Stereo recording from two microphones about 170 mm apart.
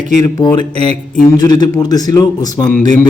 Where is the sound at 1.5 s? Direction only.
25° left (ahead or behind).